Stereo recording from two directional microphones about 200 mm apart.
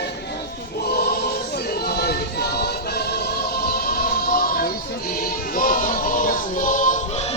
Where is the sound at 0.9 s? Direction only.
50° left (ahead or behind).